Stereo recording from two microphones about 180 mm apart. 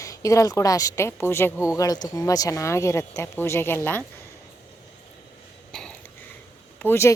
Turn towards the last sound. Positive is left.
turn(degrees=15)  # may be behind; listen again after turning